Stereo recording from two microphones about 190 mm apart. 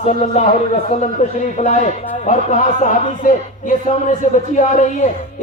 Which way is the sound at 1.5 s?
40° left (ahead or behind).